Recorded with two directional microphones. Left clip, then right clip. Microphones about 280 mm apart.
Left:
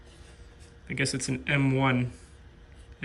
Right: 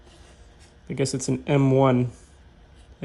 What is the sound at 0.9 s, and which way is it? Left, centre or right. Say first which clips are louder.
Speech: right 4 dB; centre.